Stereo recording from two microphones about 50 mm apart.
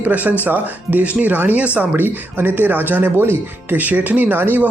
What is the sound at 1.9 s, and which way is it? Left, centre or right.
Speech, right.